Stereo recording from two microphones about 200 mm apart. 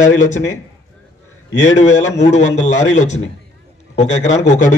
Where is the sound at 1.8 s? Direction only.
35° left (ahead or behind).